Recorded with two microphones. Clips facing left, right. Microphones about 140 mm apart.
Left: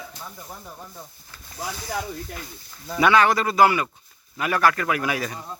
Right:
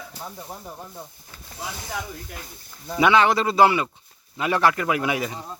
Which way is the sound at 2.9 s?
20° right (ahead or behind).